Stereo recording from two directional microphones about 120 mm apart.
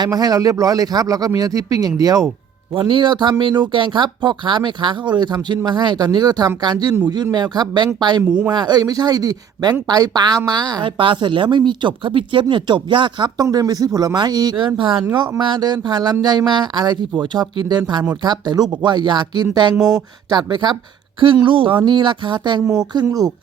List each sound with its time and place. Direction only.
0.0 s a woman's voice: 35° right (ahead or behind)
2.7 s a woman's voice: 40° right (ahead or behind)